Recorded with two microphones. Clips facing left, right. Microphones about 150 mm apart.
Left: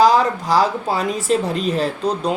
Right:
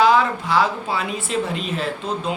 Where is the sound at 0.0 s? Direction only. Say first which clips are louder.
Left 2 dB; 40° left (ahead or behind).